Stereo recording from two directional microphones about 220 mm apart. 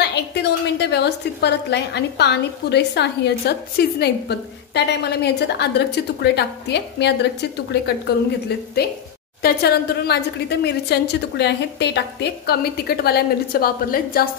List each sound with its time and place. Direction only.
0.0 s a woman's voice: 50° left (ahead or behind)
9.4 s a woman's voice: 45° left (ahead or behind)